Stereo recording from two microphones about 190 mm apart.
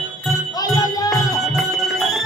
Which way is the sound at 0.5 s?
20° left (ahead or behind).